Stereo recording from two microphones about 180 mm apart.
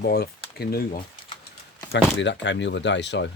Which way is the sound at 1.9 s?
80° left.